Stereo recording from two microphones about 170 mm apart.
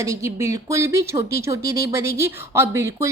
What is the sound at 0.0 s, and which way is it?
A woman's voice, 15° right (ahead or behind).